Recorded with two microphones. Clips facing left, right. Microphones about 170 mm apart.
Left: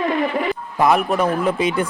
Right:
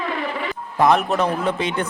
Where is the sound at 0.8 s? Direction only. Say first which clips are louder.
Even; 5° left (ahead or behind).